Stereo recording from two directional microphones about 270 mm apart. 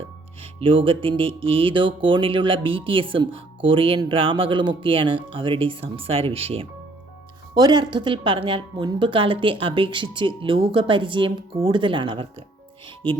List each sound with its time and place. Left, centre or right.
0.6 s a woman's voice: centre